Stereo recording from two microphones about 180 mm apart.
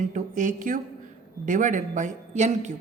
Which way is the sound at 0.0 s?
45° right (ahead or behind).